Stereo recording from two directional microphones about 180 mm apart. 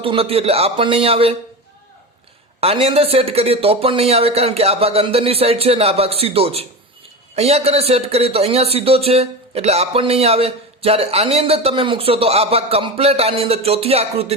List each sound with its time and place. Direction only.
0.0 s a man's voice: 30° right (ahead or behind)
2.6 s a man's voice: 35° right (ahead or behind)